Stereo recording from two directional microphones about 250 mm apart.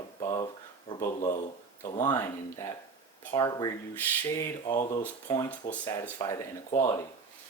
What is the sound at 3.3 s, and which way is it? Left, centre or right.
Speech, centre.